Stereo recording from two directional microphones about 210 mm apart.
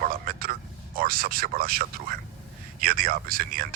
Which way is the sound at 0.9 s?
45° right (ahead or behind).